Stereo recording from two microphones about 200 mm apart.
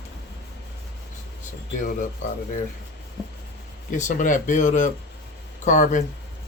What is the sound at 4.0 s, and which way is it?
Speech, 40° left (ahead or behind).